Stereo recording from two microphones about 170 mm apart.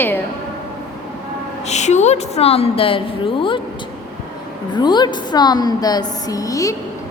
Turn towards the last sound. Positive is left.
turn(degrees=20)  # may be behind; listen again after turning